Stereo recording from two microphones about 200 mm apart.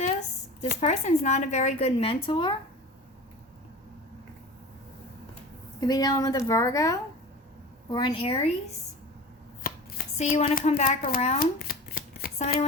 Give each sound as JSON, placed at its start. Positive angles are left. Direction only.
{"t": 0.7, "sound": "speech", "side_deg": 35}
{"t": 5.8, "sound": "a woman's voice", "side_deg": 20}
{"t": 9.6, "sound": "speech", "side_deg": 40}
{"t": 11.6, "sound": "shuffling cards", "side_deg": 45}